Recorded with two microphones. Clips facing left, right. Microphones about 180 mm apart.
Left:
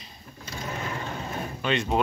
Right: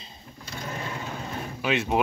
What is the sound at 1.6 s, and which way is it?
Speech, 5° right (ahead or behind).